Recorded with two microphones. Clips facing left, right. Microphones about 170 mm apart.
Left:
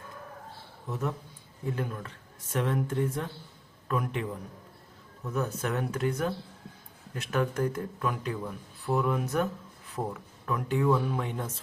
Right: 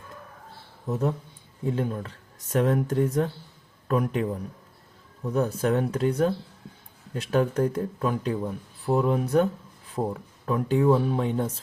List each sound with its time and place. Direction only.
0.9 s speech: 35° right (ahead or behind)